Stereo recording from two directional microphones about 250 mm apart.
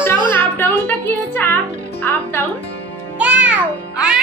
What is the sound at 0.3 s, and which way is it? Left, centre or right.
Music, centre.